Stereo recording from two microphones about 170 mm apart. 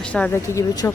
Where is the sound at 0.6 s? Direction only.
20° left (ahead or behind).